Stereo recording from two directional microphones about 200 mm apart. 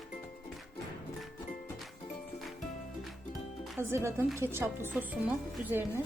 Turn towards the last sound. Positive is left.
turn(degrees=-10)  # may be behind; listen again after turning